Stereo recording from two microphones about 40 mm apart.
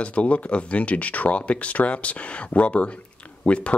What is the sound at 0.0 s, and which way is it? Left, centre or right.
Speech, left.